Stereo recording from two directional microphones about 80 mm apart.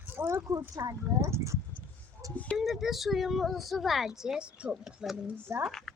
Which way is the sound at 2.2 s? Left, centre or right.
Right.